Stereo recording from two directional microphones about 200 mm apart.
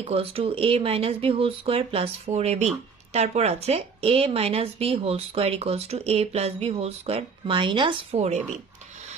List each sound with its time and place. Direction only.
0.0 s a woman's voice: 30° right (ahead or behind)